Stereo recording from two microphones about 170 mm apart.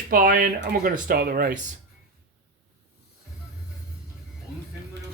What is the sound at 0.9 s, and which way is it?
Speech, 65° right (ahead or behind).